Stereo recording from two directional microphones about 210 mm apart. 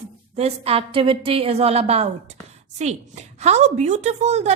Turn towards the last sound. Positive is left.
turn(degrees=-30)  # may be behind; listen again after turning